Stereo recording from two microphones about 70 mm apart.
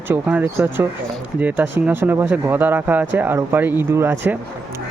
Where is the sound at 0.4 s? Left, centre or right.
Right.